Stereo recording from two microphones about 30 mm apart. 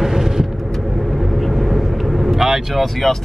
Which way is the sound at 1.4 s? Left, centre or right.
Centre.